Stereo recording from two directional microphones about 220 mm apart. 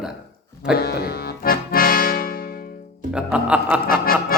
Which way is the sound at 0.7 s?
45° left (ahead or behind).